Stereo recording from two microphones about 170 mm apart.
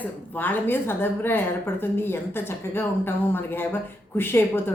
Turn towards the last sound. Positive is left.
turn(degrees=15)  # may be behind; listen again after turning